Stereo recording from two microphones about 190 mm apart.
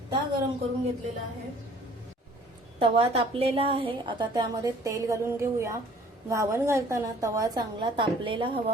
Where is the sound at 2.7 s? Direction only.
30° right (ahead or behind).